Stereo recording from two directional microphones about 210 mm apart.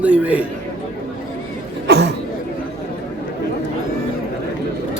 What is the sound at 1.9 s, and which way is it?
Chatter, 50° right (ahead or behind).